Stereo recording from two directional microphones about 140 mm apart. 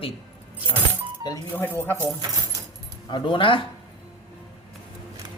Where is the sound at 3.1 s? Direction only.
35° left (ahead or behind).